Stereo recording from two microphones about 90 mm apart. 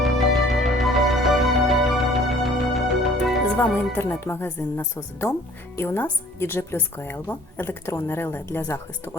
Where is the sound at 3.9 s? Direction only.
25° left (ahead or behind).